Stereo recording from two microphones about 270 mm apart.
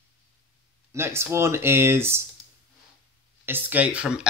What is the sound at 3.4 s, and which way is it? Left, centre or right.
Speech, centre.